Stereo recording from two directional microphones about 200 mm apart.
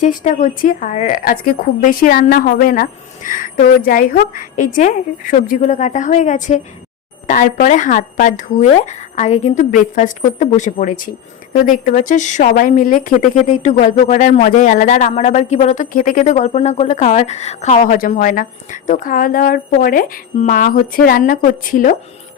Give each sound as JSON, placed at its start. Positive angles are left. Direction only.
{"t": 0.0, "sound": "speech", "side_deg": 40}